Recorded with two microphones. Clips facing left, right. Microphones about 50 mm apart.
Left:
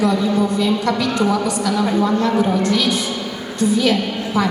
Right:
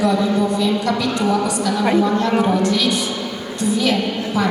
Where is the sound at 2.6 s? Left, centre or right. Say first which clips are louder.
Even; left.